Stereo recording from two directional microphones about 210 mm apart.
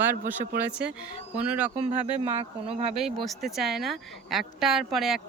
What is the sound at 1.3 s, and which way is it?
Speech, 5° right (ahead or behind).